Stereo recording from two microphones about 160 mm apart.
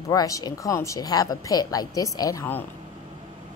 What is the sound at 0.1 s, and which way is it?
A woman's voice, 20° left (ahead or behind).